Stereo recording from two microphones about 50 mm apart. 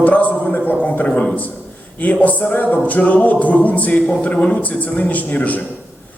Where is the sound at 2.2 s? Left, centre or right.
Left.